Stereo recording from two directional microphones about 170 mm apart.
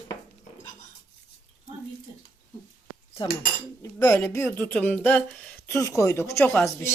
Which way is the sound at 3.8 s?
20° left (ahead or behind).